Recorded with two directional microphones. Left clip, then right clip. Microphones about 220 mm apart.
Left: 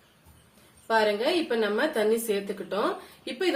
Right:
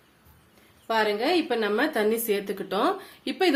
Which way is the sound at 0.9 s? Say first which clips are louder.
Even; 40° right (ahead or behind).